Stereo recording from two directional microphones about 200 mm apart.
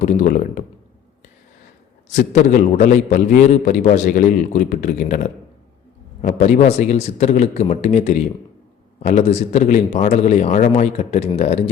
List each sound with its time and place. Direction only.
0.0 s a man's voice: 40° left (ahead or behind)
2.0 s a man's voice: 40° left (ahead or behind)